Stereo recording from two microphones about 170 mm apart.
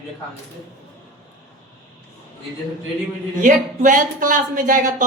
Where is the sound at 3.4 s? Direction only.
50° right (ahead or behind).